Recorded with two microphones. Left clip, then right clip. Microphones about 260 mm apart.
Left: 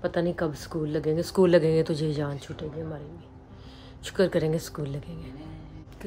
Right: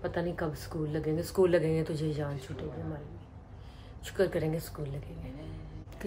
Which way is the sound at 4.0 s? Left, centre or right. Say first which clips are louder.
Left 5 dB; left.